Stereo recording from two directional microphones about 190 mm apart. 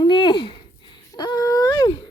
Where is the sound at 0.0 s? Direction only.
25° left (ahead or behind).